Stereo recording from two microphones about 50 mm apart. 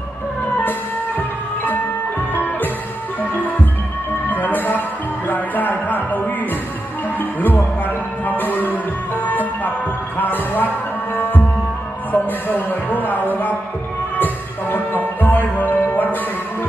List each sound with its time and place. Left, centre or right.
0.6 s music: left
4.3 s music: left